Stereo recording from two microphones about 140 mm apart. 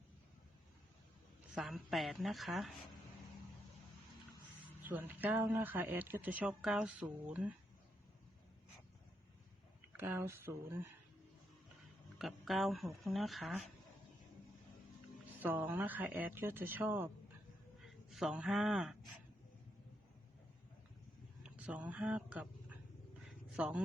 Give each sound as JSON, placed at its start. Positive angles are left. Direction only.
{"t": 1.5, "sound": "speech", "side_deg": 0}
{"t": 4.8, "sound": "speech", "side_deg": -15}
{"t": 10.0, "sound": "speech", "side_deg": -15}
{"t": 12.2, "sound": "speech", "side_deg": 0}
{"t": 15.4, "sound": "speech", "side_deg": -15}
{"t": 17.8, "sound": "speech", "side_deg": 0}
{"t": 21.4, "sound": "speech", "side_deg": -10}